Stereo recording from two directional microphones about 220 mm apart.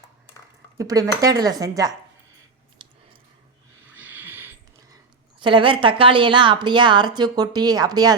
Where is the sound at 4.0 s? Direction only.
10° right (ahead or behind).